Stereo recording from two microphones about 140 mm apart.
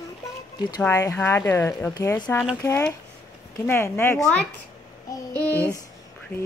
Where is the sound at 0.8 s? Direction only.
20° left (ahead or behind).